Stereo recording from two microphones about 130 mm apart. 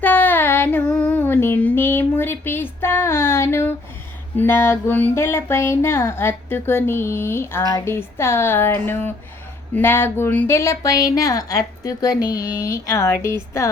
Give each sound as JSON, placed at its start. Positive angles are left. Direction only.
{"t": 0.0, "sound": "child singing", "side_deg": 15}
{"t": 0.9, "sound": "a sound", "side_deg": 10}
{"t": 4.4, "sound": "speech", "side_deg": 15}